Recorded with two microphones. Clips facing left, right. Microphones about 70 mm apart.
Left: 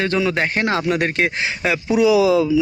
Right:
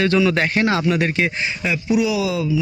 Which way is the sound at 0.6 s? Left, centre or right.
Left.